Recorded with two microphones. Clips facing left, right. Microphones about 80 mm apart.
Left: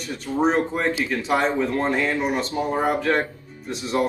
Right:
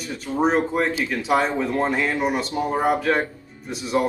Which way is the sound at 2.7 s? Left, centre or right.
Centre.